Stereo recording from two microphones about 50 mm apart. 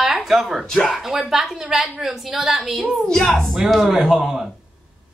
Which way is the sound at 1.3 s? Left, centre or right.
Centre.